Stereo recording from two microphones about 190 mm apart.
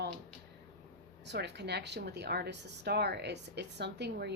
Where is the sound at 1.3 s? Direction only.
60° right (ahead or behind).